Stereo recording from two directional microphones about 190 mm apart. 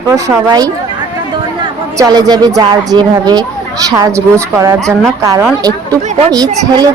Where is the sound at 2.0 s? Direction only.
20° right (ahead or behind).